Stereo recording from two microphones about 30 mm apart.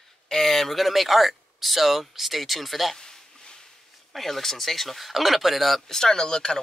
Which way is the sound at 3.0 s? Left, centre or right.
Left.